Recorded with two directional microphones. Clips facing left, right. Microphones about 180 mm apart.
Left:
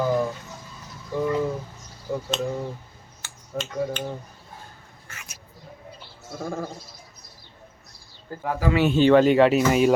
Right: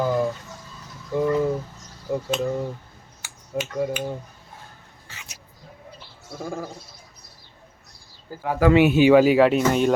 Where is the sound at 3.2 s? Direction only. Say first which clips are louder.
Right 3 dB; 10° right (ahead or behind).